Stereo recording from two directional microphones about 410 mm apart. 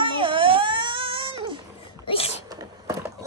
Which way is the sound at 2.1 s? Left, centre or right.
Centre.